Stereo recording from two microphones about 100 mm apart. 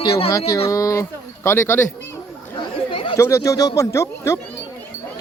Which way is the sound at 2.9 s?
60° left (ahead or behind).